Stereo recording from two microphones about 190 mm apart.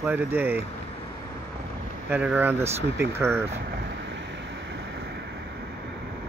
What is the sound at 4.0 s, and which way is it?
Vehicle, 70° right (ahead or behind).